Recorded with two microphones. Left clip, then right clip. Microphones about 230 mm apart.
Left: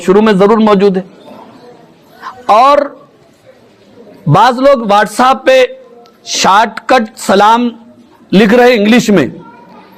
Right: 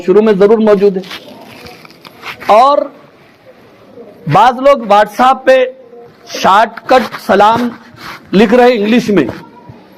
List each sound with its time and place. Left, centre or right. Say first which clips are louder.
0.0 s a man's voice: even; left
2.5 s a man's voice: left 1 dB; left
4.3 s a man's voice: even; left